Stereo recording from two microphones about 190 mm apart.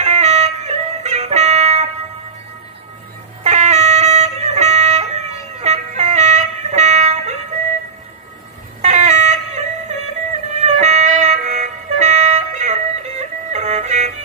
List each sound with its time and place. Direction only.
0.0 s music: 35° right (ahead or behind)
3.4 s dog: 35° right (ahead or behind)
8.8 s a sound: 35° right (ahead or behind)